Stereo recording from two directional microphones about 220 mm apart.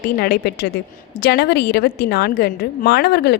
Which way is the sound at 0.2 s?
45° left (ahead or behind).